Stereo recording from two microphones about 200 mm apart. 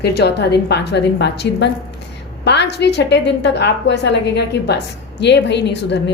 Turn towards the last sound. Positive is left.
turn(degrees=60)  # may be behind; listen again after turning